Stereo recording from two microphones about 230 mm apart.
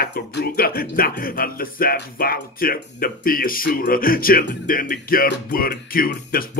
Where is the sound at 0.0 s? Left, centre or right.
Left.